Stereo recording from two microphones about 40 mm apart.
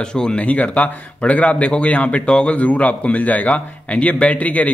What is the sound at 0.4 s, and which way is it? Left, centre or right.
A man's voice, left.